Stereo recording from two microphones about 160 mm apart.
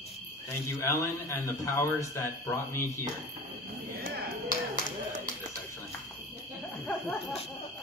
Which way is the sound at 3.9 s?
60° right (ahead or behind).